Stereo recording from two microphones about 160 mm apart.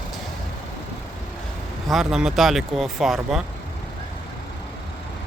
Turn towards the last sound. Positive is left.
turn(degrees=0)  # may be behind; listen again after turning